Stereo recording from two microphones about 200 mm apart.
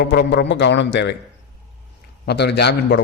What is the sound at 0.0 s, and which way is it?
A man's voice, 50° left (ahead or behind).